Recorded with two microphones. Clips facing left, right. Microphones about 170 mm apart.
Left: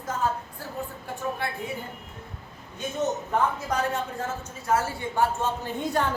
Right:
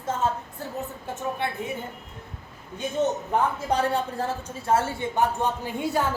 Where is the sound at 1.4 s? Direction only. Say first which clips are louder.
Right 2 dB; 20° right (ahead or behind).